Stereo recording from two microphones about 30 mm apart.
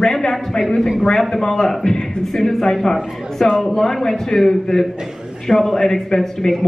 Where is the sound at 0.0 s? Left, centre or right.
Left.